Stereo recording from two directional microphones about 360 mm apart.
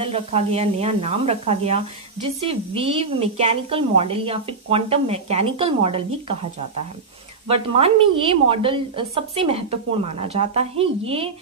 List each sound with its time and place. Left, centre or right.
0.0 s a woman's voice: centre
7.4 s a woman's voice: centre